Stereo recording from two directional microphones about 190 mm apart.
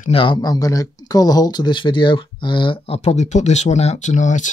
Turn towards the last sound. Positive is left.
turn(degrees=40)  # may be behind; listen again after turning